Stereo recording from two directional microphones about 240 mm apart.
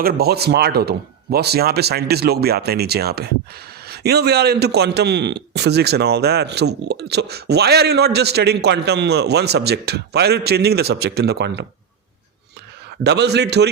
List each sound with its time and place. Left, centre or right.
0.0 s speech: right
13.1 s speech: right